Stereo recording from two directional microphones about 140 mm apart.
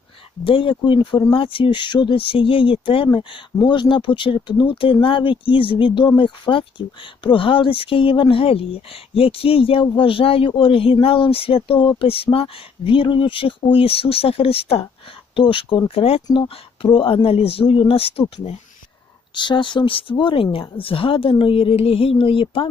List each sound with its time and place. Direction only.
0.4 s speech: 40° left (ahead or behind)
19.3 s speech: 35° left (ahead or behind)